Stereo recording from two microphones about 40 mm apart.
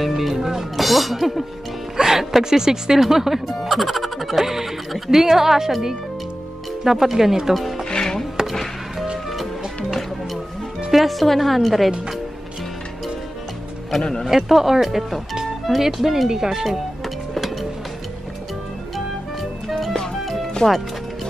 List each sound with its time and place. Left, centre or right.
0.0 s speech: centre
7.9 s music: centre
8.4 s music: centre
9.8 s music: centre
10.9 s a woman's voice: centre
14.2 s speech: centre
16.6 s music: centre
19.7 s music: centre
20.6 s speech: centre